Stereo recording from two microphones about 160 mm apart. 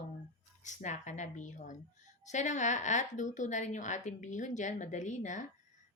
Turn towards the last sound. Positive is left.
turn(degrees=50)  # may be behind; listen again after turning